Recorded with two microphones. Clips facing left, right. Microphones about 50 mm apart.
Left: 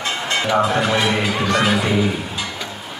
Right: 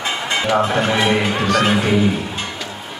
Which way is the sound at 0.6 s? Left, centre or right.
Right.